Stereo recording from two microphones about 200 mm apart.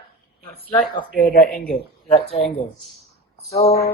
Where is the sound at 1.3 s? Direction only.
45° left (ahead or behind).